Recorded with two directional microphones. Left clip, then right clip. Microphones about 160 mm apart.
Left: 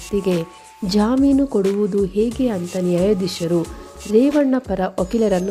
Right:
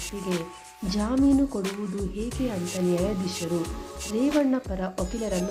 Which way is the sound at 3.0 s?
40° left (ahead or behind).